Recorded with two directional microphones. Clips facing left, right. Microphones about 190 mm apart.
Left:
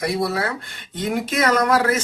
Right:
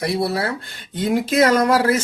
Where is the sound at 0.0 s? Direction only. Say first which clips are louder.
Right 1 dB; 30° right (ahead or behind).